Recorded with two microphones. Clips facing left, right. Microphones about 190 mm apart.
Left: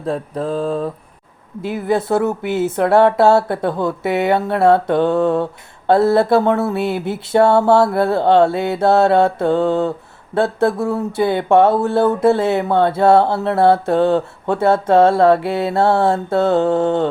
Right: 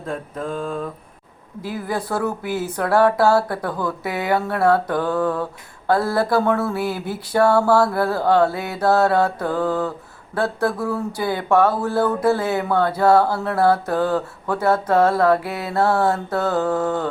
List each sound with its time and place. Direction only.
0.1 s mantra: 35° left (ahead or behind)
1.6 s speech: 25° left (ahead or behind)